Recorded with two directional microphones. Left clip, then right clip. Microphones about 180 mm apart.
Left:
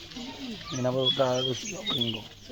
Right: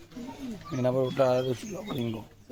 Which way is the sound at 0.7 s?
10° right (ahead or behind).